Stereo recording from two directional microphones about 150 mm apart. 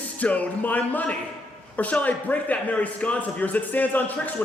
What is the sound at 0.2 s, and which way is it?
A man's voice, 10° left (ahead or behind).